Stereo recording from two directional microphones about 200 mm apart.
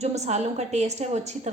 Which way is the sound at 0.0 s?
35° right (ahead or behind).